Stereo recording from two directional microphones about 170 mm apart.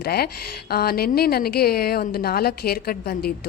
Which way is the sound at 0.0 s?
65° left (ahead or behind).